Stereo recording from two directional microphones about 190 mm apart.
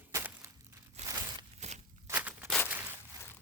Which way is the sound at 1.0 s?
35° right (ahead or behind).